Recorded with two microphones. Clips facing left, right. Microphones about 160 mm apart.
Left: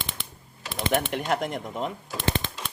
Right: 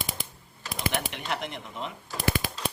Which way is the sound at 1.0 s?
45° left (ahead or behind).